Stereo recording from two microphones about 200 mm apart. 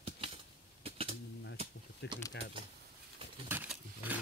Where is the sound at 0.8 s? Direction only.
30° right (ahead or behind).